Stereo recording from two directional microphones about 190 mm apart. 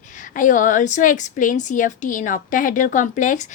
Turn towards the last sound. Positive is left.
turn(degrees=40)  # may be behind; listen again after turning